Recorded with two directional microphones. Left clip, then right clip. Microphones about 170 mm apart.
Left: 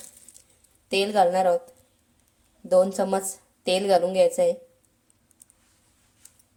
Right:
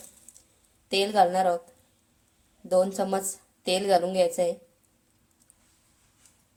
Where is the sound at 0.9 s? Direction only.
Centre (ahead or behind).